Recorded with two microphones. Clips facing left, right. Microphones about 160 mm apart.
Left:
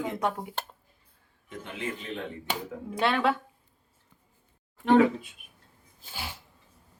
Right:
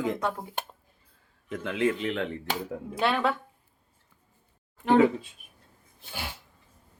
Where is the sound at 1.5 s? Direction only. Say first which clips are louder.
Right 9 dB; 90° right.